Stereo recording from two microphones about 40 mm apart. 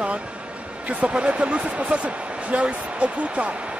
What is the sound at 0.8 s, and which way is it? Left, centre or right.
Speech, right.